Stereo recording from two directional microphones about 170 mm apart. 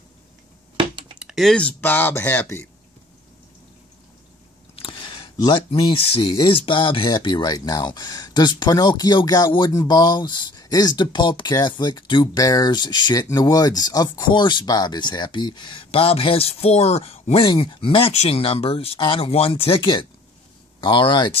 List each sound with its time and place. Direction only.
0.7 s a sound: 30° right (ahead or behind)
1.2 s speech: centre (ahead or behind)
4.7 s speech: 30° left (ahead or behind)